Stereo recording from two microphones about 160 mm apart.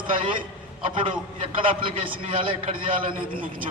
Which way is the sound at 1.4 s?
35° right (ahead or behind).